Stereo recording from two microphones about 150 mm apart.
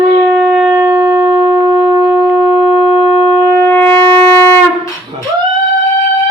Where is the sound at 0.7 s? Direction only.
20° right (ahead or behind).